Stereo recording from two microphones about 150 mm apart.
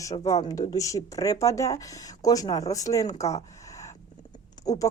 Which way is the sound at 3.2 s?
20° left (ahead or behind).